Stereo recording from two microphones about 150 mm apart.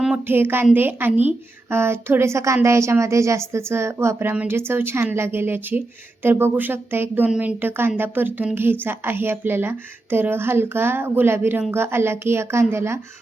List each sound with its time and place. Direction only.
0.0 s speech: 10° right (ahead or behind)